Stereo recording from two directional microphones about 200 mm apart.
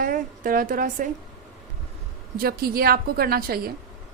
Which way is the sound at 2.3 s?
50° right (ahead or behind).